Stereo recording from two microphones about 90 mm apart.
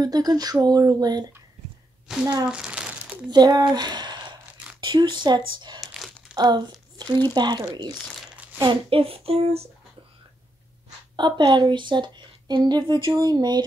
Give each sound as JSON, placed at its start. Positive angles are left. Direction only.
{"t": 0.0, "sound": "speech", "side_deg": -45}
{"t": 2.1, "sound": "a woman's voice", "side_deg": -5}
{"t": 2.4, "sound": "crumpling", "side_deg": -10}
{"t": 3.3, "sound": "a woman's voice", "side_deg": -50}
{"t": 8.6, "sound": "speech", "side_deg": -90}
{"t": 11.1, "sound": "a woman's voice", "side_deg": -60}